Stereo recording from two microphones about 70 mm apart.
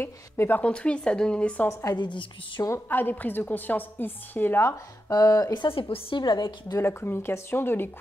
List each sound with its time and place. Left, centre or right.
0.0 s speech: left
0.6 s speech: centre
1.7 s speech: left
2.0 s a woman's voice: left
2.9 s a woman's voice: left
5.1 s speech: left
6.1 s a woman's voice: left
6.8 s speech: left